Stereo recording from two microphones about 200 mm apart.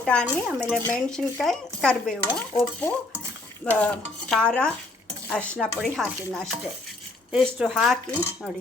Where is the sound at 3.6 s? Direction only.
5° left (ahead or behind).